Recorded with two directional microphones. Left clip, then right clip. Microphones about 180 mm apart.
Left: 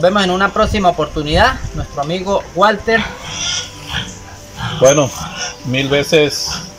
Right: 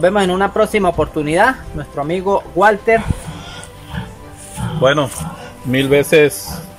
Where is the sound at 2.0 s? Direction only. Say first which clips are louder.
Even; 10° right (ahead or behind).